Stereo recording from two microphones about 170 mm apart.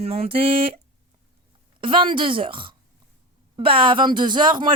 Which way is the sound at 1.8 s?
30° right (ahead or behind).